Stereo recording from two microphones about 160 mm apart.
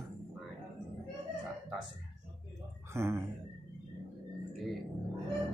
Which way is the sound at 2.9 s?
15° right (ahead or behind).